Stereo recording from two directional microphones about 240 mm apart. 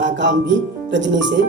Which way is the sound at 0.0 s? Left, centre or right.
Right.